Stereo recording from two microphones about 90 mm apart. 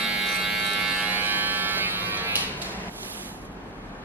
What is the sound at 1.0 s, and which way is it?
Electric shaver, 20° right (ahead or behind).